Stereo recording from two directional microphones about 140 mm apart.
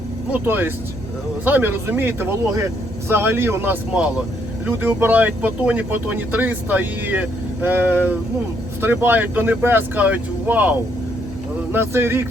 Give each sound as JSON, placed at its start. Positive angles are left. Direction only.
{"t": 0.4, "sound": "speech", "side_deg": -15}